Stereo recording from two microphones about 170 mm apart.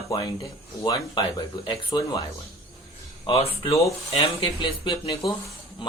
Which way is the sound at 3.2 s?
35° left (ahead or behind).